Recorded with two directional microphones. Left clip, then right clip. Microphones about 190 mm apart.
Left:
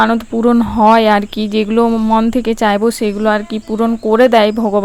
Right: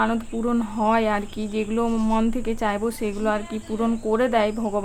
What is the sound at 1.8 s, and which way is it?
Speech, 30° left (ahead or behind).